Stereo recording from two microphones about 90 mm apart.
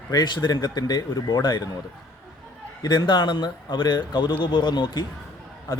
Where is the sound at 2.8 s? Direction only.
55° left (ahead or behind).